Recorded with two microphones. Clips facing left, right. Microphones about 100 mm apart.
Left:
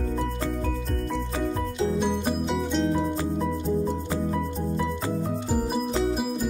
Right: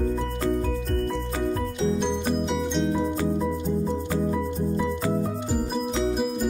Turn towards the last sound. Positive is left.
turn(degrees=0)  # may be behind; listen again after turning